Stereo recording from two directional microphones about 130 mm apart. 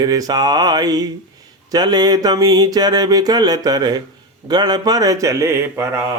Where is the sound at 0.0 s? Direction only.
30° right (ahead or behind).